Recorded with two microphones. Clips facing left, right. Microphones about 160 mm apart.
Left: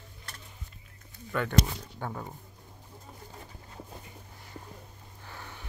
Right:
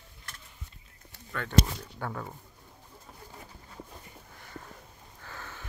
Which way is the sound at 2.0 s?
15° left (ahead or behind).